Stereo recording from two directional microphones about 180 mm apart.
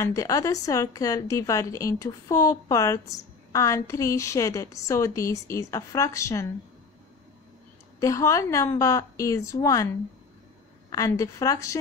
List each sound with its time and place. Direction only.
0.0 s a woman's voice: 20° left (ahead or behind)
8.0 s a woman's voice: 15° left (ahead or behind)
10.9 s a woman's voice: 20° left (ahead or behind)